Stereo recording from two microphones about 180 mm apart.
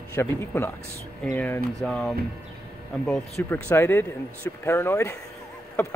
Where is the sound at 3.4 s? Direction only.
15° left (ahead or behind).